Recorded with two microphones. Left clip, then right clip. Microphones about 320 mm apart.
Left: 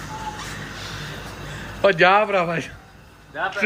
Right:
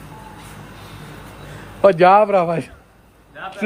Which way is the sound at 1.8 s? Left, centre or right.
Centre.